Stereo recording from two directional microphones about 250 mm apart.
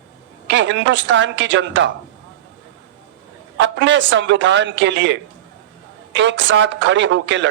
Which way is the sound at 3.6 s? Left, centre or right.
Right.